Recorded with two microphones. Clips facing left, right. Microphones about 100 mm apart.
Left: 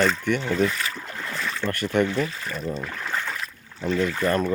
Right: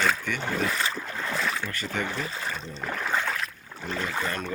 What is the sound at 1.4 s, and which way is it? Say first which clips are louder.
Boat: left 1 dB; 5° right (ahead or behind).